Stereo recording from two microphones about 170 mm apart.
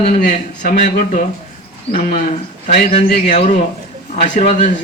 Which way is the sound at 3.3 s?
40° left (ahead or behind).